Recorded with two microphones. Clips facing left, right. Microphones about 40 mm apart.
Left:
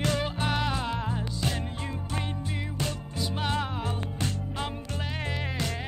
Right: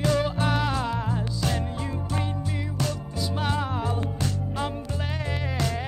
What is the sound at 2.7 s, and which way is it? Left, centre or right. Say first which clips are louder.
Music: right 3 dB; left.